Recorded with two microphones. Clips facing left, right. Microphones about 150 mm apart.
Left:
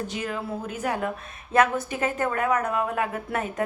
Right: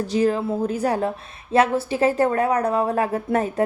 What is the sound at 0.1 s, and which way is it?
Speech, 35° right (ahead or behind).